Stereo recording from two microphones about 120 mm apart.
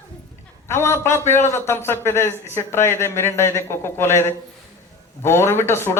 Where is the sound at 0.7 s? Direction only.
20° left (ahead or behind).